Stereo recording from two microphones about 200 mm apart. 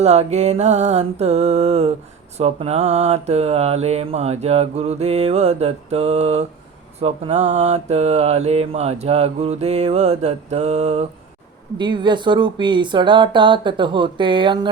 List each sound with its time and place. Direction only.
0.0 s mantra: 35° right (ahead or behind)
11.8 s speech: 25° right (ahead or behind)